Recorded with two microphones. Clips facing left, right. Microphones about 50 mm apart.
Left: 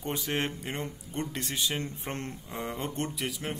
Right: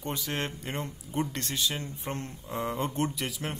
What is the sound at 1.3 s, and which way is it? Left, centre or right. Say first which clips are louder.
Speech: even; centre.